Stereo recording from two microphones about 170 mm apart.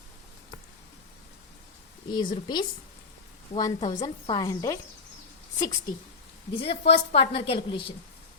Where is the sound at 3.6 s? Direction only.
25° left (ahead or behind).